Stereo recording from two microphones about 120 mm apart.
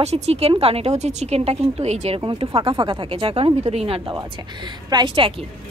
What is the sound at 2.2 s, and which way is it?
A woman's voice, 50° right (ahead or behind).